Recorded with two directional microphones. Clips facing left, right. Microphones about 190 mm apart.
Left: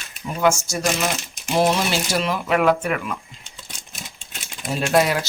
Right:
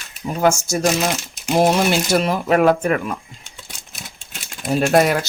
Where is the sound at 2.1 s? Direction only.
45° right (ahead or behind).